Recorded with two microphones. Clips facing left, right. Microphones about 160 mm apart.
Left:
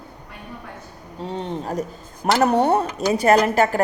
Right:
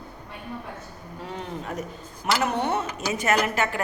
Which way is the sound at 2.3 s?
40° left (ahead or behind).